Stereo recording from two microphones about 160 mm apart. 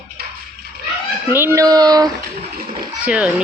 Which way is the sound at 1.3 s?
15° right (ahead or behind).